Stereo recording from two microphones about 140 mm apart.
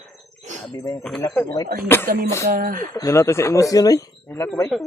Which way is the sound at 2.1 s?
90° right.